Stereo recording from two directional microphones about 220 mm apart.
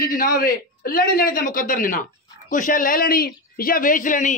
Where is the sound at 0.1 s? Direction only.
40° left (ahead or behind).